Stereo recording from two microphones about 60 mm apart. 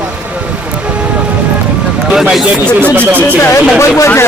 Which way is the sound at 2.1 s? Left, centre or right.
Centre.